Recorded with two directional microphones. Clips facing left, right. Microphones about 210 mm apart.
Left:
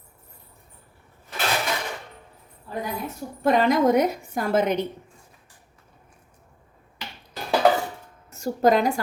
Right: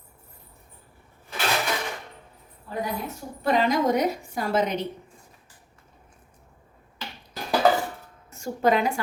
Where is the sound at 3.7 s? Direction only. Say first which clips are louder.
Left 3 dB; 50° left (ahead or behind).